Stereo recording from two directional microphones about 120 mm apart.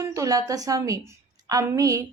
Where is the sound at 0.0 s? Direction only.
25° right (ahead or behind).